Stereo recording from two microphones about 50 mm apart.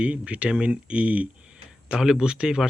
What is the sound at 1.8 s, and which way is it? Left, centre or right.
Speech, centre.